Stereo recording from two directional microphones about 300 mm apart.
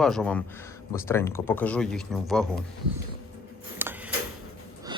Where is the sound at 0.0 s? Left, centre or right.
Centre.